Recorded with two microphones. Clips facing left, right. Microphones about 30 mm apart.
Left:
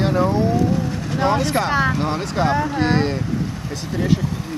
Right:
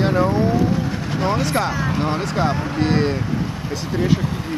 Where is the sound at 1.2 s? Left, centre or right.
Centre.